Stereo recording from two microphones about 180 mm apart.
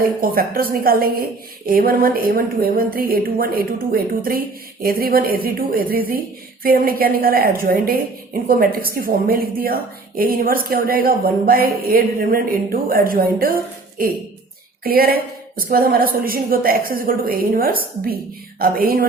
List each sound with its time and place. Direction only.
0.0 s a woman's voice: 55° right (ahead or behind)